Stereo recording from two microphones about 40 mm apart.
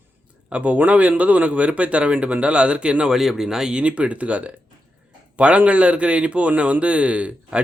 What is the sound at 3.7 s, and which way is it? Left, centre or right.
A man's voice, right.